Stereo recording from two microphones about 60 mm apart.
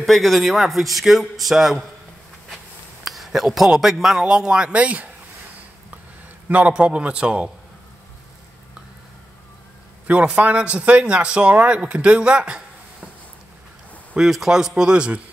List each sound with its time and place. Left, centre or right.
0.0 s speech: centre; by 5.1 s right
6.5 s a man's voice: right
10.0 s a man's voice: right
14.1 s speech: centre